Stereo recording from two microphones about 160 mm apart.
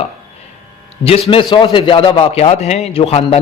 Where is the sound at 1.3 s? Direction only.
30° left (ahead or behind).